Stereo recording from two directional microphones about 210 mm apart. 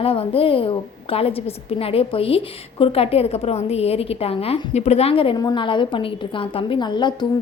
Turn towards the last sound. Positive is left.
turn(degrees=20)  # may be behind; listen again after turning